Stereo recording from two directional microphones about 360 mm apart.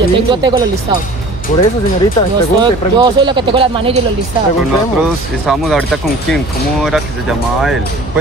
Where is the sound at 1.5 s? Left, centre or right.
Centre.